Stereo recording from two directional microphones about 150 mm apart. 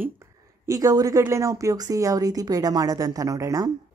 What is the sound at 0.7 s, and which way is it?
A woman's voice, 20° right (ahead or behind).